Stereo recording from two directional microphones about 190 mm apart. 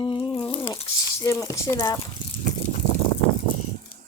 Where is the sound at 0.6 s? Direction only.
20° left (ahead or behind).